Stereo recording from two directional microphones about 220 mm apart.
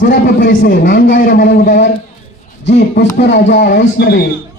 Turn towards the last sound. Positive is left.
turn(degrees=45)  # may be behind; listen again after turning